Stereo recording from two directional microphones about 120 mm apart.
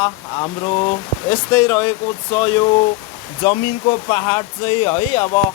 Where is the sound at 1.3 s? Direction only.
45° left (ahead or behind).